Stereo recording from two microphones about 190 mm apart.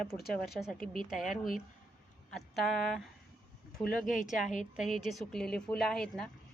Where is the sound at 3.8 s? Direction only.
45° left (ahead or behind).